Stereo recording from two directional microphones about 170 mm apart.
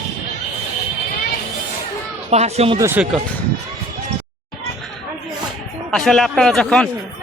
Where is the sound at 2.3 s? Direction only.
40° right (ahead or behind).